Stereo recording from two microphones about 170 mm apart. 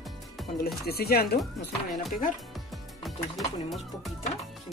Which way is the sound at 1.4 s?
Centre (ahead or behind).